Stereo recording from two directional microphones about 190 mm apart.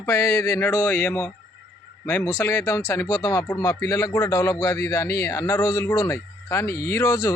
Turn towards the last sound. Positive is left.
turn(degrees=15)  # may be behind; listen again after turning